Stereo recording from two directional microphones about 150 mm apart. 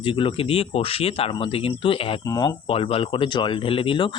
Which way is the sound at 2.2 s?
25° left (ahead or behind).